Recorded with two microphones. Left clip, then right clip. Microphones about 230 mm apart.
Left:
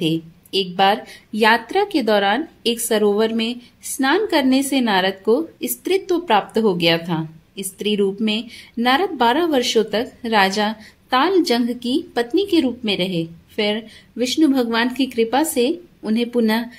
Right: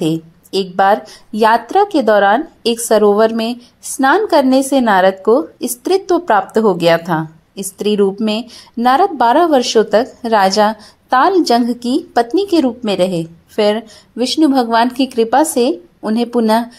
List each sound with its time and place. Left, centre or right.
0.0 s a woman's voice: right